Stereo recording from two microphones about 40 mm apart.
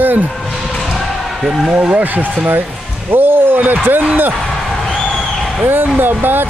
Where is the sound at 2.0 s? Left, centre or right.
Right.